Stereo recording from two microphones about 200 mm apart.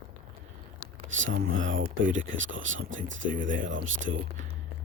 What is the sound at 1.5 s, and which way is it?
Speech, 70° right (ahead or behind).